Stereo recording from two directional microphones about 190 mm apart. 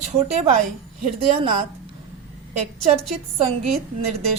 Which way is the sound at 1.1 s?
30° right (ahead or behind).